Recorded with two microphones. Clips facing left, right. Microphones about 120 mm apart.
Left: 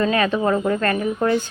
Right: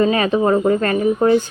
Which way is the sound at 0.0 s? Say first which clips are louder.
Right 3 dB; 25° right (ahead or behind).